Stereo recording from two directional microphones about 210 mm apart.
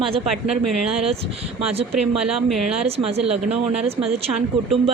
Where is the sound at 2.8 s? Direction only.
30° right (ahead or behind).